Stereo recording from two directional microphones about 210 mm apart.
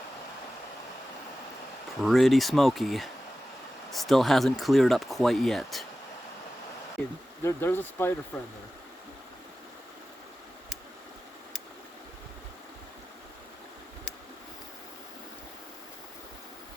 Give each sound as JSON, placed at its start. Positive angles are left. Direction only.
{"t": 2.0, "sound": "speech", "side_deg": 0}
{"t": 7.0, "sound": "speech", "side_deg": 5}